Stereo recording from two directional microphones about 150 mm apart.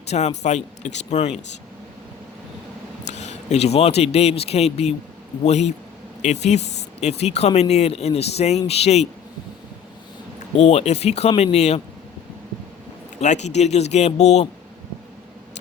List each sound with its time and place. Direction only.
0.1 s speech: 50° left (ahead or behind)
3.1 s speech: 50° left (ahead or behind)
10.6 s speech: 45° left (ahead or behind)
13.1 s speech: 50° left (ahead or behind)